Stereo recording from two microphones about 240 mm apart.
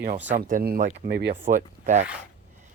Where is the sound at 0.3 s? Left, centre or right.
Right.